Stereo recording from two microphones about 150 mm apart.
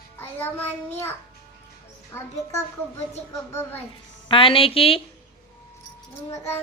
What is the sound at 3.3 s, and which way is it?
Speech, 15° left (ahead or behind).